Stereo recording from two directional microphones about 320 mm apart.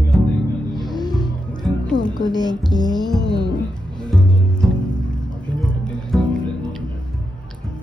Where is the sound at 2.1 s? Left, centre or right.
Centre.